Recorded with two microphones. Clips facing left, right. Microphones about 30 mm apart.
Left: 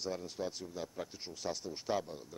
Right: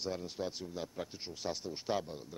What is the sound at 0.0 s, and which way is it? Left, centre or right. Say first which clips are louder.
Speech: right 1 dB; centre.